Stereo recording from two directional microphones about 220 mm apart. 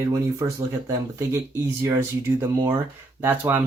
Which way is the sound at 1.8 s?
10° right (ahead or behind).